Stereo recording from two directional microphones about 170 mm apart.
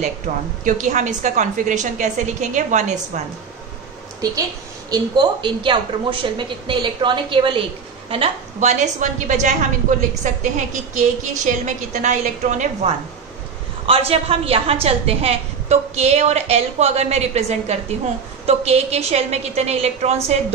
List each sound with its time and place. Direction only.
0.3 s a woman's voice: 50° right (ahead or behind)
4.9 s a woman's voice: 25° right (ahead or behind)